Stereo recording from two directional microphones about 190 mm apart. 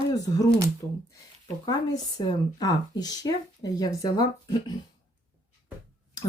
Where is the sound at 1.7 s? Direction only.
20° left (ahead or behind).